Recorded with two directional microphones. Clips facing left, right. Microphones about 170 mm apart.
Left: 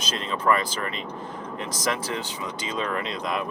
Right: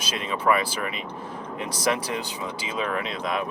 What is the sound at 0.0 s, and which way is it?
Speech, 10° right (ahead or behind).